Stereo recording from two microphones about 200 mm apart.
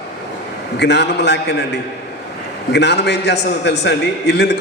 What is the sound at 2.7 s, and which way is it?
A man's voice, 55° left (ahead or behind).